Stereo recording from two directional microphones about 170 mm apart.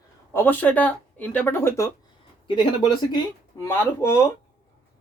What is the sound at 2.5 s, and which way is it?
Speech, 30° left (ahead or behind).